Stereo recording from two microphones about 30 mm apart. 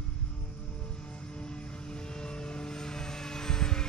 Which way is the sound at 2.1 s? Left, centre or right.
Left.